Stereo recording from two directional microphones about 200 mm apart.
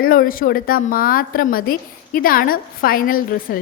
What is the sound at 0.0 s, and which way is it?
A woman's voice, 45° left (ahead or behind).